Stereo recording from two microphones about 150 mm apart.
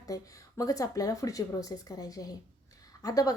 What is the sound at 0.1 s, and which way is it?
A woman's voice, 20° left (ahead or behind).